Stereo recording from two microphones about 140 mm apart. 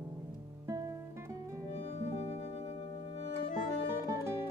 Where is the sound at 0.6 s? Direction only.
25° right (ahead or behind).